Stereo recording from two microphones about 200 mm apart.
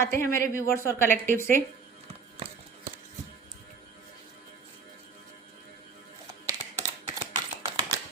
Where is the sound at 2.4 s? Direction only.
30° right (ahead or behind).